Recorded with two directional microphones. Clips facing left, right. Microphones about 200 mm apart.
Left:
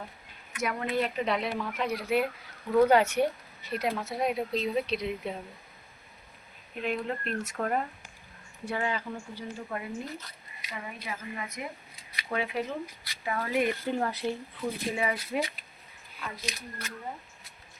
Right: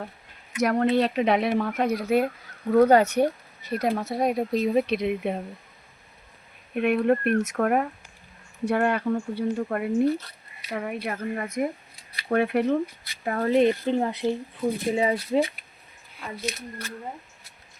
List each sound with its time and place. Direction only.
0.6 s speech: 65° right (ahead or behind)
6.7 s speech: 60° right (ahead or behind)
13.2 s speech: 45° right (ahead or behind)
13.5 s speech: 25° right (ahead or behind)